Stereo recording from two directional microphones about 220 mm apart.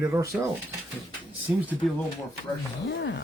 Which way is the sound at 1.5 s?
5° right (ahead or behind).